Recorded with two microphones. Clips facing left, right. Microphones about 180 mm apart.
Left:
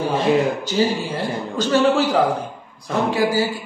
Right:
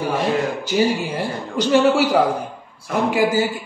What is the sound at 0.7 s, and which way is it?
A man's voice, 15° right (ahead or behind).